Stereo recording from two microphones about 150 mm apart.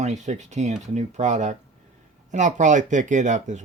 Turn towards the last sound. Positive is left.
turn(degrees=-55)  # may be behind; listen again after turning